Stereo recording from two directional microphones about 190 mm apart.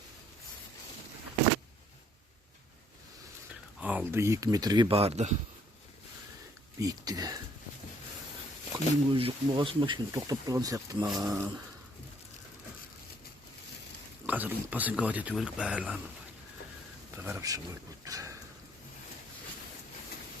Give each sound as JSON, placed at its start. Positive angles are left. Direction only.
{"t": 3.8, "sound": "speech", "side_deg": -10}
{"t": 6.7, "sound": "speech", "side_deg": -20}
{"t": 9.1, "sound": "speech", "side_deg": -30}
{"t": 14.3, "sound": "speech", "side_deg": -10}
{"t": 17.2, "sound": "speech", "side_deg": -15}
{"t": 18.0, "sound": "a sound", "side_deg": -15}